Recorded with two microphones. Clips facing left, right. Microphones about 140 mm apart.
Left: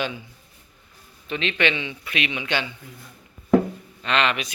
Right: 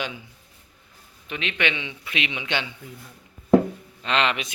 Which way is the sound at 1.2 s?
10° right (ahead or behind).